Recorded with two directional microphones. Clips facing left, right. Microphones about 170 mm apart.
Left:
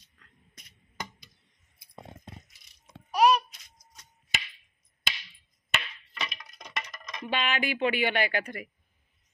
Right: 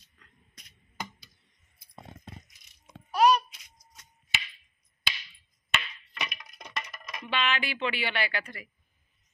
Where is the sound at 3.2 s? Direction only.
5° left (ahead or behind).